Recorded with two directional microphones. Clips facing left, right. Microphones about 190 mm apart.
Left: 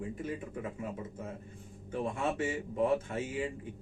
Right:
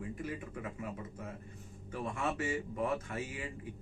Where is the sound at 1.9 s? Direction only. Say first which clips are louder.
Left 4 dB; 30° left (ahead or behind).